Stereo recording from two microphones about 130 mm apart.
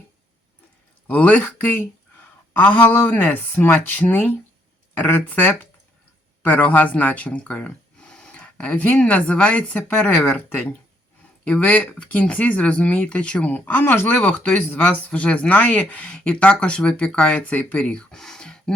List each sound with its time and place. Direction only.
1.0 s speech: 10° left (ahead or behind)